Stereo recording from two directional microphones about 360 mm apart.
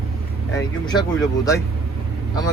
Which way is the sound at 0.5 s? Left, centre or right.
Centre.